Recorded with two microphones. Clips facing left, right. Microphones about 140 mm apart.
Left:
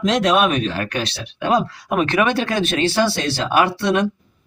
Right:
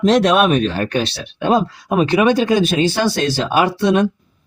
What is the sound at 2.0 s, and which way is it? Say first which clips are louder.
Speech: right 5 dB; 15° right (ahead or behind).